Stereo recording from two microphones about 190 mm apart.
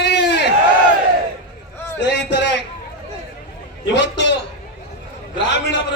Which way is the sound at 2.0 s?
65° left (ahead or behind).